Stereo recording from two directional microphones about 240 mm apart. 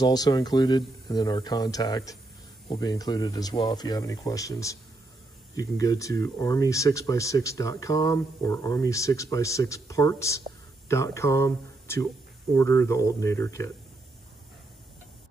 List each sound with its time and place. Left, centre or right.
0.0 s speech: centre